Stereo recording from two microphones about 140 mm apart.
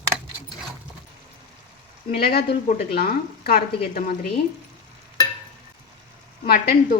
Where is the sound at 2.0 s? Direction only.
90° left.